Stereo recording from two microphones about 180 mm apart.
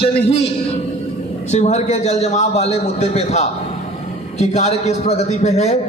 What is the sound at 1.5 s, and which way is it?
A man's voice, 40° left (ahead or behind).